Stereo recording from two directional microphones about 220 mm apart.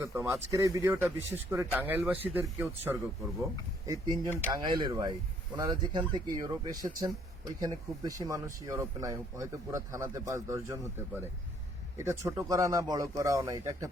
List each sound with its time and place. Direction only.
0.0 s speech: 15° right (ahead or behind)